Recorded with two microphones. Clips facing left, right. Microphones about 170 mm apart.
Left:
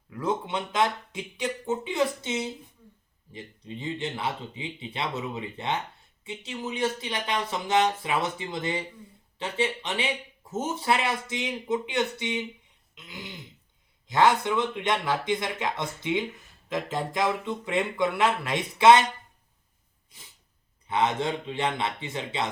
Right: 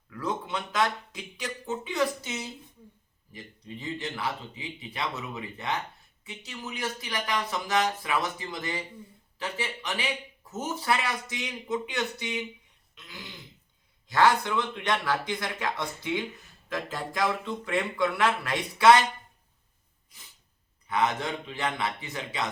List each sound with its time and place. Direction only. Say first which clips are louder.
0.1 s speech: left 3 dB; 25° left (ahead or behind)
12.9 s throat clearing: left 4 dB; 20° left (ahead or behind)
14.1 s speech: left 1 dB; 20° left (ahead or behind)
20.8 s speech: left 2 dB; 25° left (ahead or behind)